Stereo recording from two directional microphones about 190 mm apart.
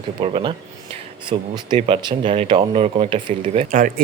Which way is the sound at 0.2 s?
25° right (ahead or behind).